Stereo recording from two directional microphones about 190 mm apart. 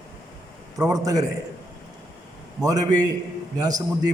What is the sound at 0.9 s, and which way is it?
Speech, 20° right (ahead or behind).